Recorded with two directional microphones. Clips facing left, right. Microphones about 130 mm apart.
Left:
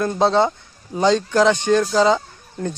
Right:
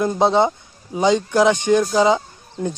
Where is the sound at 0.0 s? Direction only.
15° right (ahead or behind).